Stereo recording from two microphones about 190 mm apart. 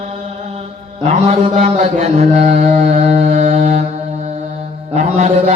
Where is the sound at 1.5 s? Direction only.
40° right (ahead or behind).